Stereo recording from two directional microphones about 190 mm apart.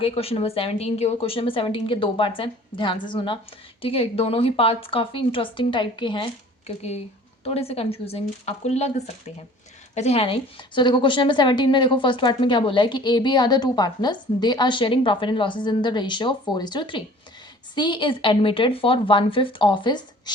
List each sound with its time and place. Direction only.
0.0 s a woman's voice: 30° left (ahead or behind)